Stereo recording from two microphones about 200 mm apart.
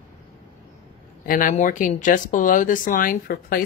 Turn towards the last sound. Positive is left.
turn(degrees=45)  # may be behind; listen again after turning